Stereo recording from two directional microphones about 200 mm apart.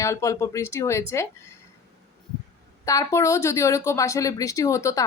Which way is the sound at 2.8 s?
15° left (ahead or behind).